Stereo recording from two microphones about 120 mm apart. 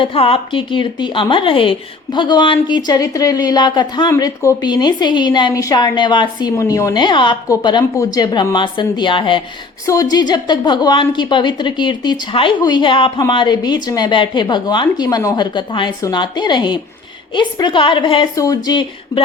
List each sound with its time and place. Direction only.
0.0 s a woman's voice: 50° left (ahead or behind); by 6.9 s 25° left (ahead or behind)
6.9 s a woman's voice: 40° left (ahead or behind)
9.8 s a woman's voice: 30° left (ahead or behind)
15.5 s a woman's voice: 40° left (ahead or behind)
18.3 s a woman's voice: 30° left (ahead or behind)